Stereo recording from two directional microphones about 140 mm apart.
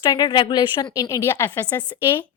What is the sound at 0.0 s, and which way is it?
A woman's voice, 30° left (ahead or behind).